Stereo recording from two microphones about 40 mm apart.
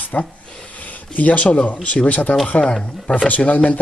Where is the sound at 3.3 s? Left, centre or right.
Left.